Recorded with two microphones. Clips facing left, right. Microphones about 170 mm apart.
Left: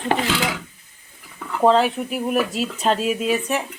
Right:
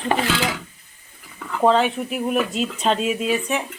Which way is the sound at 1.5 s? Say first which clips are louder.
Left 1 dB; centre (ahead or behind).